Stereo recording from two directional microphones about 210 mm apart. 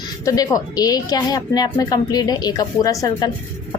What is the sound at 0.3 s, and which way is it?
A woman's voice, 15° left (ahead or behind).